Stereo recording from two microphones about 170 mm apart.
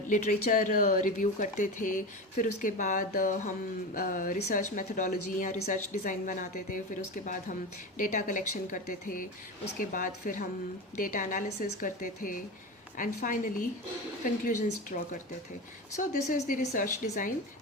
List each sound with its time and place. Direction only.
0.1 s speech: 50° left (ahead or behind)